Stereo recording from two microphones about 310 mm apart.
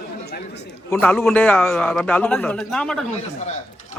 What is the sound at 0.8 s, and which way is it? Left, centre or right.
A man's voice, centre.